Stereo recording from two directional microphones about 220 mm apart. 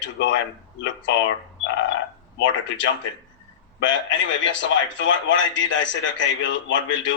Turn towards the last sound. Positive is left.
turn(degrees=60)  # may be behind; listen again after turning